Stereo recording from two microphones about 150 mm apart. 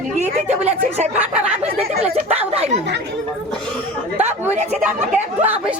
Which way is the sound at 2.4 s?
45° right (ahead or behind).